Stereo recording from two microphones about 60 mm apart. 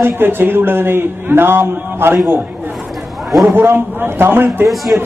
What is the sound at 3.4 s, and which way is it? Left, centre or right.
A man's voice, right.